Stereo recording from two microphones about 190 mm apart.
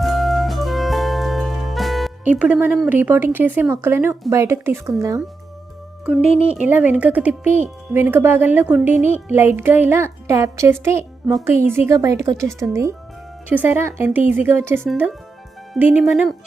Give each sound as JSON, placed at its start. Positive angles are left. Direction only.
{"t": 0.0, "sound": "music", "side_deg": 0}
{"t": 4.3, "sound": "speech", "side_deg": -15}
{"t": 6.6, "sound": "speech", "side_deg": -10}